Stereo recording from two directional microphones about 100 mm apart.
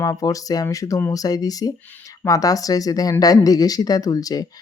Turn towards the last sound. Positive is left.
turn(degrees=40)  # may be behind; listen again after turning